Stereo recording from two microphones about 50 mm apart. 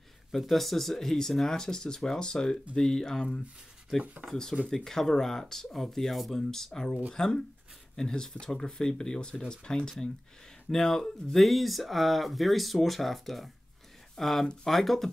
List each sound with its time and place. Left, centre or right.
0.3 s speech: centre
4.3 s speech: centre